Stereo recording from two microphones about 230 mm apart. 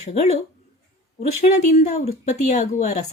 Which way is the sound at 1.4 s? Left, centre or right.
Left.